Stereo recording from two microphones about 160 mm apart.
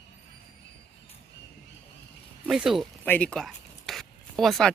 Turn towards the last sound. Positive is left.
turn(degrees=0)  # may be behind; listen again after turning